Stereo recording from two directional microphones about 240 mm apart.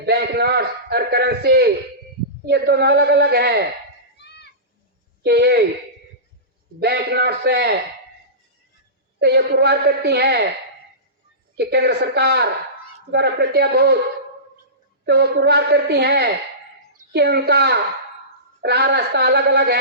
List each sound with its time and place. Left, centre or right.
0.0 s a man's voice: right
4.2 s a sound: left
5.2 s a woman's voice: right
6.7 s a woman's voice: right
9.2 s a woman's voice: right
11.5 s a woman's voice: right
15.0 s a woman's voice: right